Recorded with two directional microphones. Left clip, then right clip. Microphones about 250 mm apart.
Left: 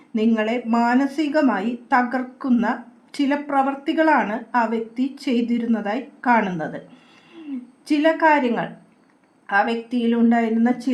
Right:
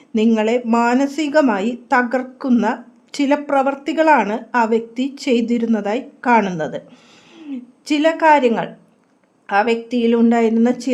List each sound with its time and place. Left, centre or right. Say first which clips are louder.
0.1 s a woman's voice: right 5 dB; right
7.9 s a woman's voice: right 4 dB; right